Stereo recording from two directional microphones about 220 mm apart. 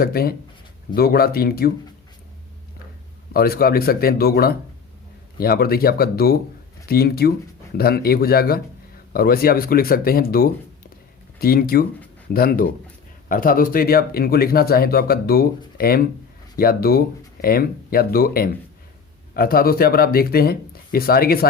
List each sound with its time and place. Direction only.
0.0 s speech: 45° left (ahead or behind)
3.3 s speech: 45° left (ahead or behind)